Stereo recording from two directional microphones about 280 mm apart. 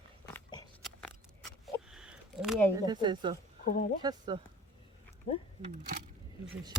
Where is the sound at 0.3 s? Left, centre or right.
Centre.